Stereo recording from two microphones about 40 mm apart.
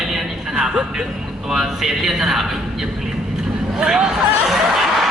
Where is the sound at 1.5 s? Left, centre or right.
Centre.